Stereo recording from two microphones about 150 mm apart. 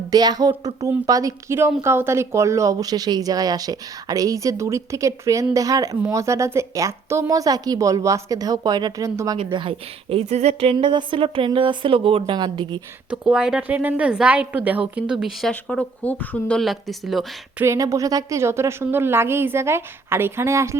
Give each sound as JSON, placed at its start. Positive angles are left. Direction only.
{"t": 0.1, "sound": "speech", "side_deg": -25}
{"t": 9.4, "sound": "a woman's voice", "side_deg": -35}
{"t": 13.1, "sound": "a woman's voice", "side_deg": -5}
{"t": 17.6, "sound": "a woman's voice", "side_deg": -20}